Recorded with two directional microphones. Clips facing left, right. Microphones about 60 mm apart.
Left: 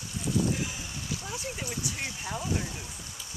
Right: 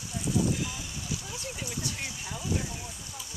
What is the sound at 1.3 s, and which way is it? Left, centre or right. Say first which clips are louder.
Speech: left 2 dB; left.